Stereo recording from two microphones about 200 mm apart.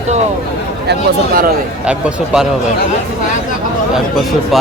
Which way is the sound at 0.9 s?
45° right (ahead or behind).